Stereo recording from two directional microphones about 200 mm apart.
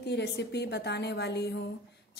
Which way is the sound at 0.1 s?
55° left (ahead or behind).